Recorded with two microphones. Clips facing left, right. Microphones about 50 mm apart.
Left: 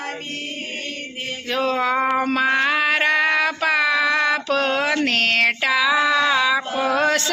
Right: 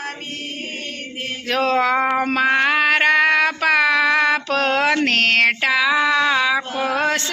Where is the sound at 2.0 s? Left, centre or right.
Right.